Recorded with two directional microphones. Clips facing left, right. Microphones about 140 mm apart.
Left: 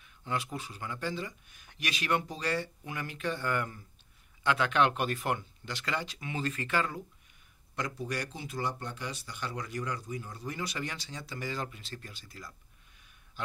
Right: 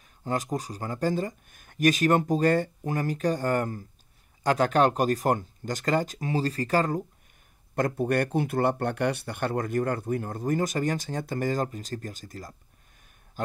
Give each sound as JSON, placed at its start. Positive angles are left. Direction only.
{"t": 0.0, "sound": "speech", "side_deg": -40}
{"t": 7.7, "sound": "speech", "side_deg": -55}